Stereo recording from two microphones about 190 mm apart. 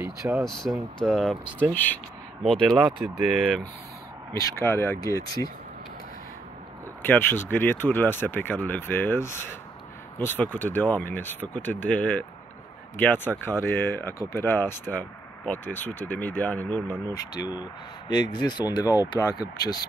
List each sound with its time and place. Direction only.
0.0 s speech: 5° right (ahead or behind)
4.3 s speech: 15° left (ahead or behind)
7.0 s speech: 10° left (ahead or behind)
17.3 s speech: 20° left (ahead or behind)